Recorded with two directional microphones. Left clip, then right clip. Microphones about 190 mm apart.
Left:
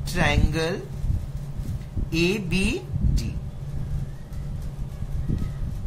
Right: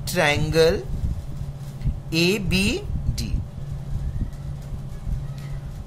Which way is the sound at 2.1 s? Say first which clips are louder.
Right 3 dB; 50° right (ahead or behind).